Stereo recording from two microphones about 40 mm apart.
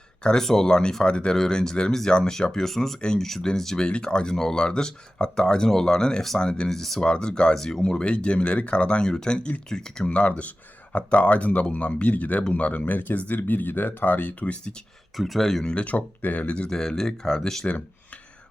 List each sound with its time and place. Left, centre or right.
0.2 s speech: left
1.4 s speech: centre
6.7 s speech: centre
7.0 s speech: left
7.5 s speech: centre
7.8 s speech: left
10.1 s speech: left
14.5 s speech: left
15.1 s speech: centre
15.6 s speech: left
16.6 s speech: centre